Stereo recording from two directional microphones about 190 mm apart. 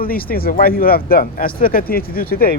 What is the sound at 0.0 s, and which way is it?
Speech, 50° left (ahead or behind).